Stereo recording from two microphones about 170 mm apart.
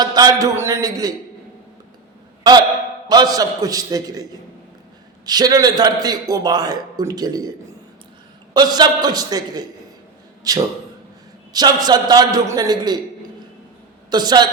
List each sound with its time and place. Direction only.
0.0 s a man's voice: 25° right (ahead or behind)
3.1 s a man's voice: 20° right (ahead or behind)
8.5 s a man's voice: 25° right (ahead or behind)
14.1 s a man's voice: 25° right (ahead or behind)